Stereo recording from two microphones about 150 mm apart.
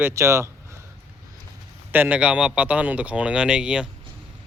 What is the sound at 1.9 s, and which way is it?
A man's voice, 10° right (ahead or behind).